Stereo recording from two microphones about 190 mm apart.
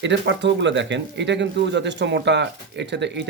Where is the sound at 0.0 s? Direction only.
70° right (ahead or behind).